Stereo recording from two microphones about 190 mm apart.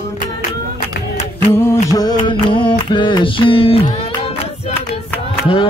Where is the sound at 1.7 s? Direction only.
20° left (ahead or behind).